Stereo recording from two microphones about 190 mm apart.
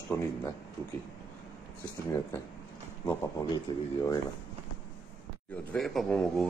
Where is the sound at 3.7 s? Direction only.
25° left (ahead or behind).